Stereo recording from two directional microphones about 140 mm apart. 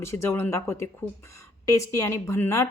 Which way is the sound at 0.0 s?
20° left (ahead or behind).